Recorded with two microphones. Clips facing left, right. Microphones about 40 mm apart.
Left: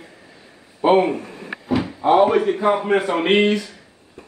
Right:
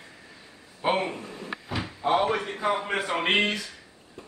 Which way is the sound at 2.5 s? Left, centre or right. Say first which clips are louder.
Left 8 dB; left.